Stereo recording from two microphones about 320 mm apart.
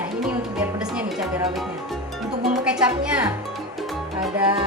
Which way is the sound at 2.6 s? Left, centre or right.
Centre.